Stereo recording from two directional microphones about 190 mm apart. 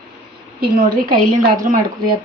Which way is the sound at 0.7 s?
50° right (ahead or behind).